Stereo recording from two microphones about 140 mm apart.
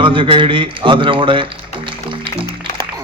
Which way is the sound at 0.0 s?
35° right (ahead or behind).